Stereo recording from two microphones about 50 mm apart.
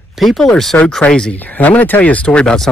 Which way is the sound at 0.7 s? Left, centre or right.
Left.